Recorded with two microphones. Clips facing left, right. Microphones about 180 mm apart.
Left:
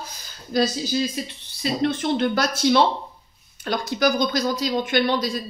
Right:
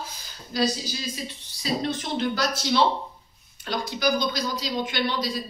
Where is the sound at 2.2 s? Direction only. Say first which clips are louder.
Left 4 dB; 55° left (ahead or behind).